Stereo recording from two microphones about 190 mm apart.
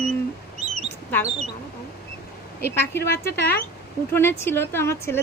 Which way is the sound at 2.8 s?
10° left (ahead or behind).